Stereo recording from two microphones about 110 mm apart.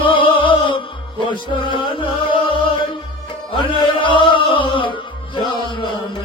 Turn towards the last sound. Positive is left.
turn(degrees=45)  # may be behind; listen again after turning